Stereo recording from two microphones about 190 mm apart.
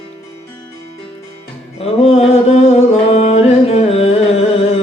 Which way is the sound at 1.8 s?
30° left (ahead or behind).